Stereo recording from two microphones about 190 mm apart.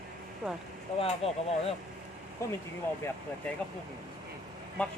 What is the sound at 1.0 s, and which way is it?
Speech, 30° left (ahead or behind).